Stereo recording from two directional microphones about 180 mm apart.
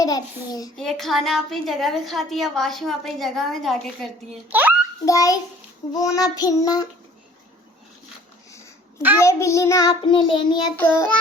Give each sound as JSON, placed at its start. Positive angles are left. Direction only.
{"t": 0.0, "sound": "child singing", "side_deg": 20}
{"t": 0.8, "sound": "a woman's voice", "side_deg": 0}
{"t": 4.4, "sound": "a child's voice", "side_deg": -10}
{"t": 5.0, "sound": "child singing", "side_deg": 20}
{"t": 8.4, "sound": "babbling", "side_deg": 15}
{"t": 9.2, "sound": "child singing", "side_deg": 15}
{"t": 10.8, "sound": "child singing", "side_deg": 10}